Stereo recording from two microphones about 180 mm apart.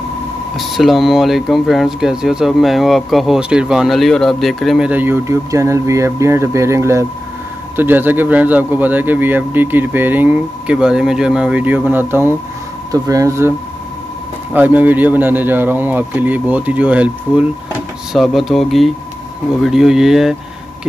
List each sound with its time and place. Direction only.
0.6 s speech: centre (ahead or behind)